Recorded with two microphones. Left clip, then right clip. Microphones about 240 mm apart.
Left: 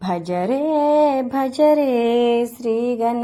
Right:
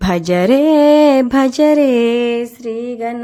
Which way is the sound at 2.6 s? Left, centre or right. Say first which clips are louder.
Left 2 dB; centre.